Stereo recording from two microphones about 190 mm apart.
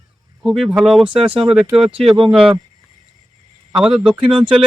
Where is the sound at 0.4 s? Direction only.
Centre (ahead or behind).